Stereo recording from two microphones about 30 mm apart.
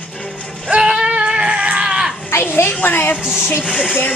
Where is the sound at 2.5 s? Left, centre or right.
Left.